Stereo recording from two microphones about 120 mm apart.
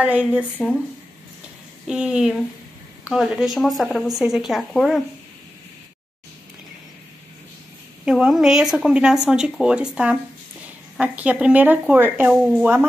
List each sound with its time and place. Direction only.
0.0 s speech: 10° right (ahead or behind)
1.9 s speech: 5° right (ahead or behind)
8.0 s speech: 5° right (ahead or behind)
12.4 s speech: centre (ahead or behind)